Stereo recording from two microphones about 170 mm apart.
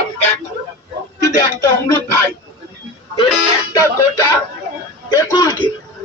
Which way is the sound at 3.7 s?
15° left (ahead or behind).